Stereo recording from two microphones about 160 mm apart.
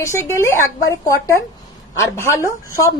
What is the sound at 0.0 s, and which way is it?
Speech, 15° left (ahead or behind).